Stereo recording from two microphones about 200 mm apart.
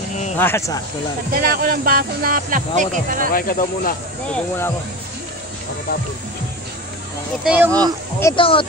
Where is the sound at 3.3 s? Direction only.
45° left (ahead or behind).